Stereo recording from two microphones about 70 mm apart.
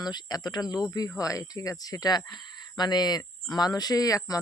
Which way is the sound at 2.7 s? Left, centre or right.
Left.